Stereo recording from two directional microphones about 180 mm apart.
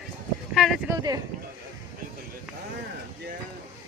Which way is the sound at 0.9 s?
20° right (ahead or behind).